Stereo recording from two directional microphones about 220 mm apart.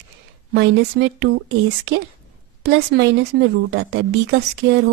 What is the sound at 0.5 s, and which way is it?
Speech, 50° right (ahead or behind).